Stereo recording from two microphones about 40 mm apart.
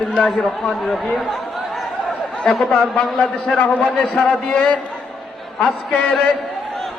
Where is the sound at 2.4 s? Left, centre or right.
Centre.